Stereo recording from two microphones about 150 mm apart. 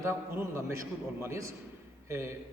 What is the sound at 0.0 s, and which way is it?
A man's voice, 20° right (ahead or behind).